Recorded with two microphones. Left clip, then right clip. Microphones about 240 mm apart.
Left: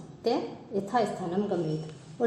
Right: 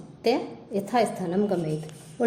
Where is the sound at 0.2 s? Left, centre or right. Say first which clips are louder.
Right 4 dB; right.